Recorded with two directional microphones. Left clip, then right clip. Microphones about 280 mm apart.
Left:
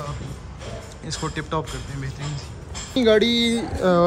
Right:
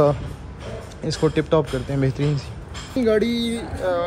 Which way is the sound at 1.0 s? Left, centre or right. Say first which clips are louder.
Right 9 dB; centre.